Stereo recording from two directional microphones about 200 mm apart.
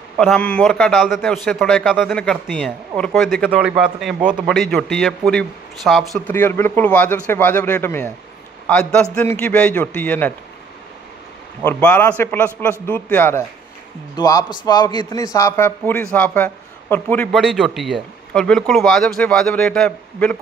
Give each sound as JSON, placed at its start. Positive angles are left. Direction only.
{"t": 0.2, "sound": "a man's voice", "side_deg": 5}
{"t": 11.6, "sound": "a man's voice", "side_deg": 10}